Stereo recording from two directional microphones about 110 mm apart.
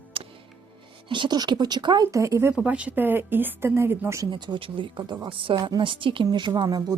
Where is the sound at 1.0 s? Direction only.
45° right (ahead or behind).